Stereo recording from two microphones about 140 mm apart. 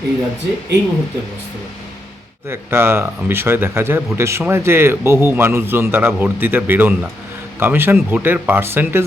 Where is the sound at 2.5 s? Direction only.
15° right (ahead or behind).